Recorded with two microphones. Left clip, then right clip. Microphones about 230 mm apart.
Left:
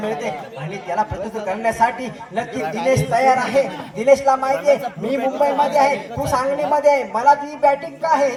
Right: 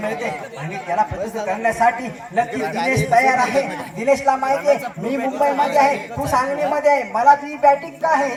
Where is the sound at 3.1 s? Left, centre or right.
Left.